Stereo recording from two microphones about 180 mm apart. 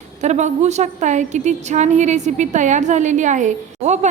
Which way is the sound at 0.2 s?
40° right (ahead or behind).